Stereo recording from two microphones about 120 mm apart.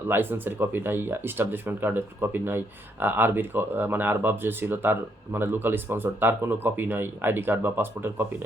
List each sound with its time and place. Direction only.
0.1 s speech: 15° right (ahead or behind)